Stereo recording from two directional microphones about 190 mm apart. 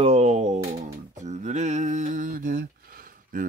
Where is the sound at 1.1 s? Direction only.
40° right (ahead or behind).